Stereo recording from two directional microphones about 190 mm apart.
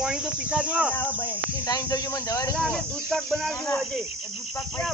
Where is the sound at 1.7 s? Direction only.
20° left (ahead or behind).